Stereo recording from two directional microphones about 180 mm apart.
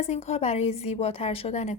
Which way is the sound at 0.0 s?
35° left (ahead or behind).